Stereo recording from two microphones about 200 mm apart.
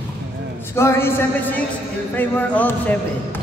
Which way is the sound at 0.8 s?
10° left (ahead or behind).